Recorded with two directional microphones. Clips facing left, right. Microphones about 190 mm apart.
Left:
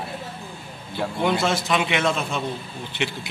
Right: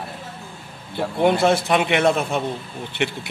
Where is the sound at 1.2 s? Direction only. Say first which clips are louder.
Right 6 dB; 55° right (ahead or behind).